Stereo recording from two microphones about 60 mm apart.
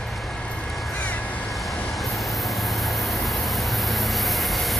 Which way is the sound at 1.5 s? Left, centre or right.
Centre.